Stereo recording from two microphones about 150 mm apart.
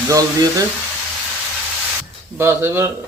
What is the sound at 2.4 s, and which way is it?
Speech, 15° right (ahead or behind).